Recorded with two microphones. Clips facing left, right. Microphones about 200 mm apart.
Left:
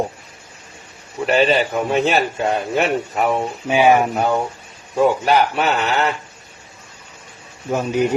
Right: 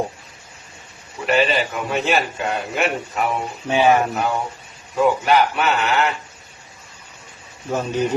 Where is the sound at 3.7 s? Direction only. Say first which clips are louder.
Left 2 dB; 15° left (ahead or behind).